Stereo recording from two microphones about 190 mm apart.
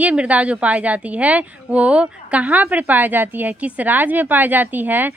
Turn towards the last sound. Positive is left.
turn(degrees=-10)  # may be behind; listen again after turning